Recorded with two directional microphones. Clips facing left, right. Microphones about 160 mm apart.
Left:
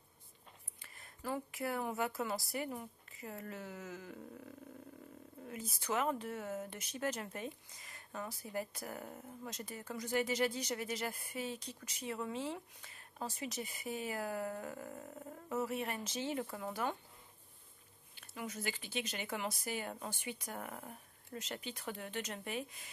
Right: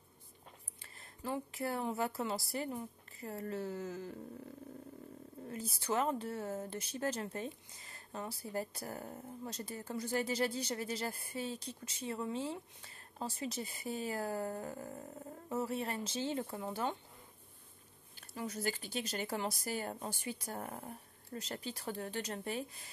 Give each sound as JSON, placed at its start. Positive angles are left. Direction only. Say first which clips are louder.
{"t": 0.8, "sound": "speech", "louder": "right 1 dB", "side_deg": -30}
{"t": 5.5, "sound": "speech", "louder": "right 2 dB", "side_deg": -35}
{"t": 18.1, "sound": "speech", "louder": "right 3 dB", "side_deg": -35}